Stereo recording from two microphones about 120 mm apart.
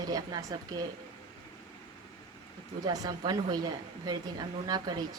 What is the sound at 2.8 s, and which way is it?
Speech, 30° right (ahead or behind).